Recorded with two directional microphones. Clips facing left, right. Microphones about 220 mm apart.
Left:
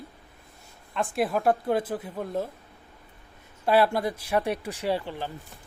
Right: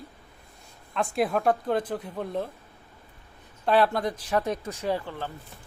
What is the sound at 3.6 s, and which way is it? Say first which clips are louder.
Speech: left 1 dB; 10° left (ahead or behind).